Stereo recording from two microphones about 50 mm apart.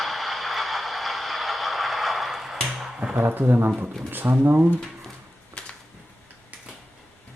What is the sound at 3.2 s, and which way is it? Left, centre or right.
Speech, right.